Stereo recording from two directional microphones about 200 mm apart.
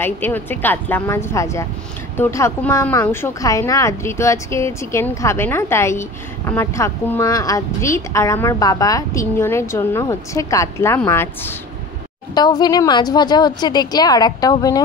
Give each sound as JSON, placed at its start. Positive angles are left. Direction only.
{"t": 0.0, "sound": "a woman's voice", "side_deg": 10}